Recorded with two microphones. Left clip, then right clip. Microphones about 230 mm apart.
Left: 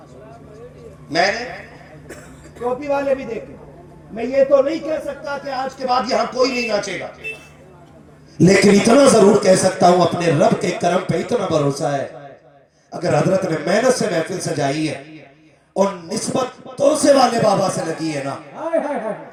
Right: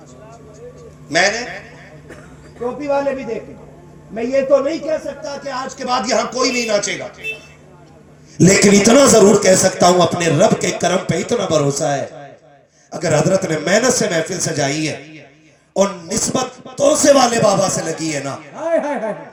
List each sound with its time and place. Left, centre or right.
1.1 s a man's voice: right
2.8 s a man's voice: centre
5.2 s a man's voice: right
8.4 s a man's voice: right